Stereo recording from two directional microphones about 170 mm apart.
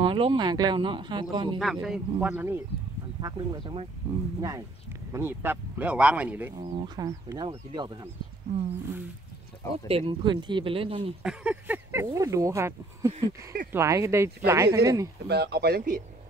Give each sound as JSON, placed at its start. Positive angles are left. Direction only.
{"t": 0.0, "sound": "speech", "side_deg": -30}
{"t": 1.6, "sound": "speech", "side_deg": 0}
{"t": 3.2, "sound": "speech", "side_deg": -25}
{"t": 4.0, "sound": "speech", "side_deg": -10}
{"t": 4.4, "sound": "speech", "side_deg": -20}
{"t": 6.6, "sound": "speech", "side_deg": -30}
{"t": 9.8, "sound": "speech", "side_deg": -30}
{"t": 11.2, "sound": "speech", "side_deg": -10}
{"t": 15.2, "sound": "speech", "side_deg": -80}